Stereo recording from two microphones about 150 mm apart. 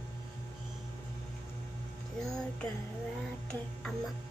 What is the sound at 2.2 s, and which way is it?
Music, 5° left (ahead or behind).